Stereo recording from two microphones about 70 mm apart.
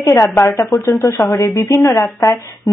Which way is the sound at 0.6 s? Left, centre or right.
Left.